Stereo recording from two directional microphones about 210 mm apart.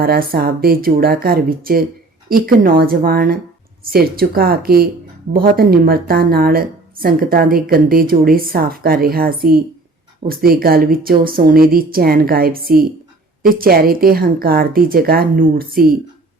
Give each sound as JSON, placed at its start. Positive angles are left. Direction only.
{"t": 0.0, "sound": "speech", "side_deg": -45}